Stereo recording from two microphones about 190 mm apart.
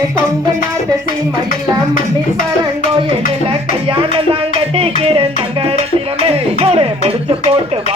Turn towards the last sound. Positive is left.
turn(degrees=-30)  # may be behind; listen again after turning